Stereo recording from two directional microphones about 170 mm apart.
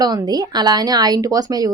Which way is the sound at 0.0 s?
20° right (ahead or behind).